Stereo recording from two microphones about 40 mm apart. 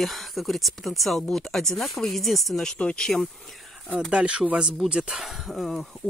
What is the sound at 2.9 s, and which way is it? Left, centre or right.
Speech, centre.